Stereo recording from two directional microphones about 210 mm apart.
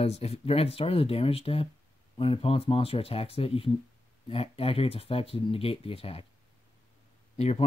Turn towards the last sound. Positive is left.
turn(degrees=30)  # may be behind; listen again after turning